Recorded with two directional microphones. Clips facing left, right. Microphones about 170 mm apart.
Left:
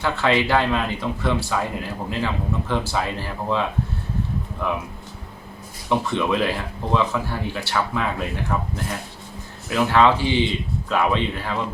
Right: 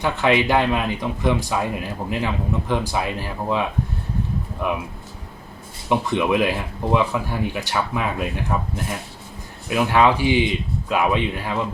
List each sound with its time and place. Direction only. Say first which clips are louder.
0.0 s speech: right 2 dB; 15° right (ahead or behind)
5.9 s speech: right 2 dB; 15° right (ahead or behind)